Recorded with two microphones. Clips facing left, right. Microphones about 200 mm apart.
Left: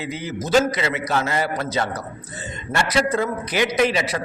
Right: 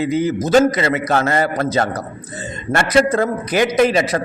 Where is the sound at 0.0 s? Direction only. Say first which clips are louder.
Right 10 dB; 45° right (ahead or behind).